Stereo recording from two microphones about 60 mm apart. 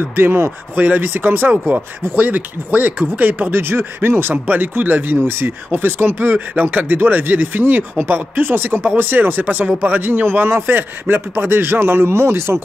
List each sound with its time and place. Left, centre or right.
0.1 s speech: right